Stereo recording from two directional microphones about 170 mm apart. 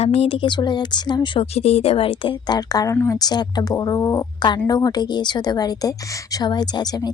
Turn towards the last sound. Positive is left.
turn(degrees=25)  # may be behind; listen again after turning